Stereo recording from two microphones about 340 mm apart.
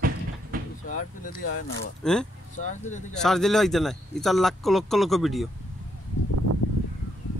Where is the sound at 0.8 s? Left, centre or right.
Left.